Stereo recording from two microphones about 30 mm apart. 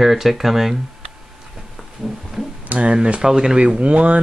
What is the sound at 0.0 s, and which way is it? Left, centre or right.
Speech, centre.